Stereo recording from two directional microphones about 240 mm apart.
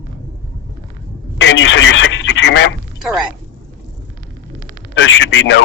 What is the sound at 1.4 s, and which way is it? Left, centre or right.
Speech, left.